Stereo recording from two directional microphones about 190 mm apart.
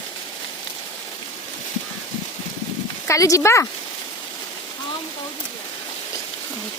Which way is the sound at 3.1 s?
15° left (ahead or behind).